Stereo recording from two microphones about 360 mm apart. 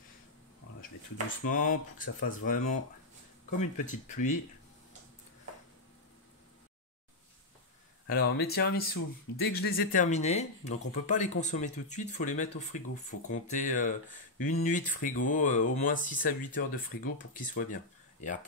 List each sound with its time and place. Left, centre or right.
1.5 s speech: left
8.1 s speech: left